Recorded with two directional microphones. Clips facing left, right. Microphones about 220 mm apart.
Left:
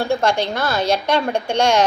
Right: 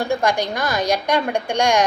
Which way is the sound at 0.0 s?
15° right (ahead or behind).